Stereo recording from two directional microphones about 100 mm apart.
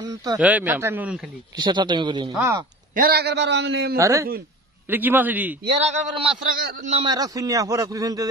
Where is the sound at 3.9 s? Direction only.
30° right (ahead or behind).